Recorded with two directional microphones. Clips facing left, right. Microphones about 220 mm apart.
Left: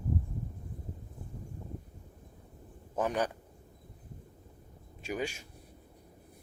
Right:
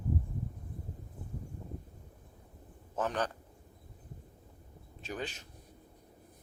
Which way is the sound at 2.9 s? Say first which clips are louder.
Left 3 dB; 10° left (ahead or behind).